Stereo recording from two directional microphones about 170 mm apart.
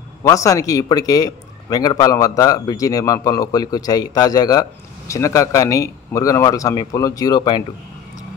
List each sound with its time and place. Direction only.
0.2 s a man's voice: 20° left (ahead or behind)